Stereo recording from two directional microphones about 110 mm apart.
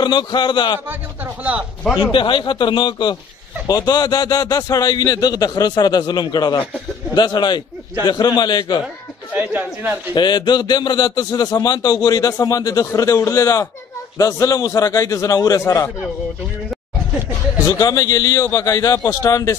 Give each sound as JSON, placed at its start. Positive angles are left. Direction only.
{"t": 0.0, "sound": "speech", "side_deg": 45}
{"t": 2.1, "sound": "a man's voice", "side_deg": 50}
{"t": 9.3, "sound": "a man's voice", "side_deg": -15}
{"t": 10.1, "sound": "a man's voice", "side_deg": 40}
{"t": 17.6, "sound": "a man's voice", "side_deg": 35}